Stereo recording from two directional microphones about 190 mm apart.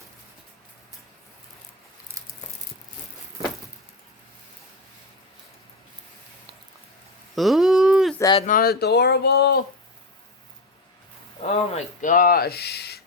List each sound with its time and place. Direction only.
7.3 s a sound: centre (ahead or behind)
8.4 s speech: 45° left (ahead or behind)
11.4 s speech: 35° left (ahead or behind); by 13.0 s 60° left (ahead or behind)